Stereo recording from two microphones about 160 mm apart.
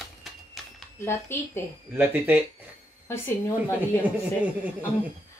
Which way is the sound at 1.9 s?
10° right (ahead or behind).